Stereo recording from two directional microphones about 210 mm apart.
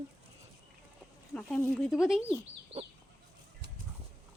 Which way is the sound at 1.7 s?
Centre (ahead or behind).